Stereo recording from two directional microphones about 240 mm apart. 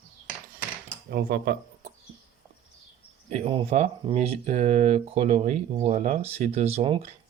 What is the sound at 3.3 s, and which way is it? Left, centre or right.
Speech, right.